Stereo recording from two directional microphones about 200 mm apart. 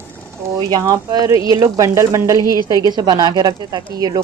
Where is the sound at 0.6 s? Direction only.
20° right (ahead or behind).